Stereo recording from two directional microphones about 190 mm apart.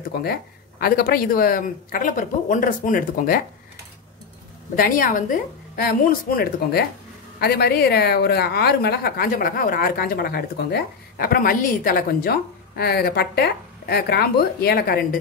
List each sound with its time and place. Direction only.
0.1 s speech: 55° left (ahead or behind)
4.7 s a woman's voice: 45° left (ahead or behind)